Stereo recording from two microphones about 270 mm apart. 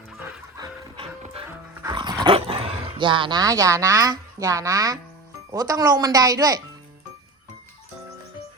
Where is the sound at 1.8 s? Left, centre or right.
Centre.